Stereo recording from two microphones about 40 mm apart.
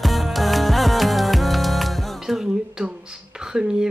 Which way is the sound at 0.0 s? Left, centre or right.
Centre.